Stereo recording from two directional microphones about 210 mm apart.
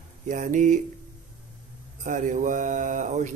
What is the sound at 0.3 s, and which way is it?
Speech, 35° right (ahead or behind).